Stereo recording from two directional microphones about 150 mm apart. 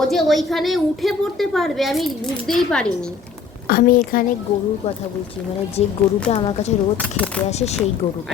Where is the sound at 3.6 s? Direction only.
75° left (ahead or behind).